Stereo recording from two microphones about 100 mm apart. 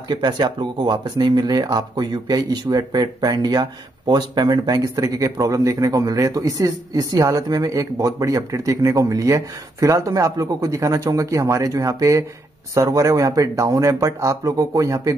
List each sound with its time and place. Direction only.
0.1 s speech: 45° right (ahead or behind)